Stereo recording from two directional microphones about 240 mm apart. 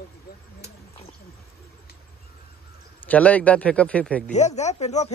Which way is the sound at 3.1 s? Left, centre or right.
Centre.